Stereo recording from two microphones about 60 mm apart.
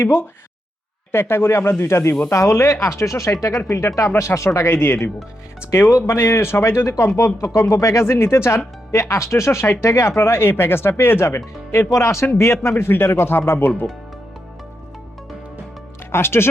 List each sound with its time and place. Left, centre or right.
0.0 s speech: left
4.2 s speech: left
6.1 s speech: left
16.1 s speech: left